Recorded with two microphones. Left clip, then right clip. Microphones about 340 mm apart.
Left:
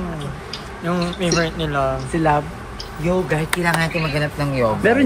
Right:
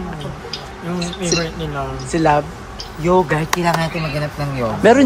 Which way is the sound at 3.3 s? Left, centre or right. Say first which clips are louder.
Right 2 dB; right.